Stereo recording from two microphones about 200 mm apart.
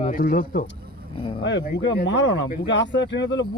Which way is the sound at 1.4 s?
60° left (ahead or behind).